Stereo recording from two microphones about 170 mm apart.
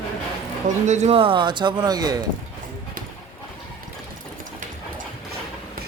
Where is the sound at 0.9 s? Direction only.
40° right (ahead or behind); by 2.2 s 25° right (ahead or behind).